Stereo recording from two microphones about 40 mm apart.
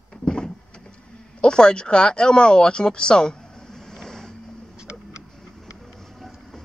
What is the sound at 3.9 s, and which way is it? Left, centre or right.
Vehicle, centre.